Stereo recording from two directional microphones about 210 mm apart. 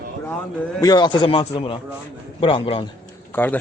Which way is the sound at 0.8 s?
20° left (ahead or behind).